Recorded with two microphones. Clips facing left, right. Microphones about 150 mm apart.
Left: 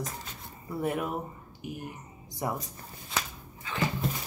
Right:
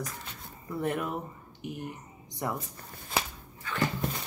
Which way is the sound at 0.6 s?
10° left (ahead or behind).